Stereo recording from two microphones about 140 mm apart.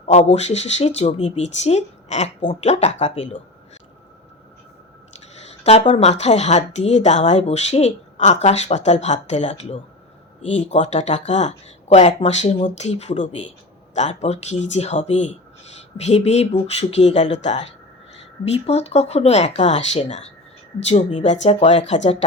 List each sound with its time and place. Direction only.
0.0 s speech: 50° left (ahead or behind)
5.8 s speech: 45° left (ahead or behind)